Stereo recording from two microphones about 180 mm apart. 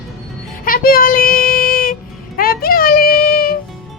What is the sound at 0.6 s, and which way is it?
Child singing, 55° left (ahead or behind).